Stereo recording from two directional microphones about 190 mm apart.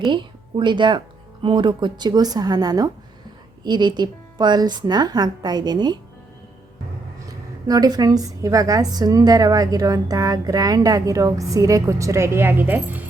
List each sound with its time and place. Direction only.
0.0 s a woman's voice: 25° right (ahead or behind)
7.7 s a woman's voice: 20° right (ahead or behind)